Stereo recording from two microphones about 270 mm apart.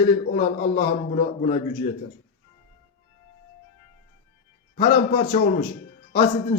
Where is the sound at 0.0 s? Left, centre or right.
Left.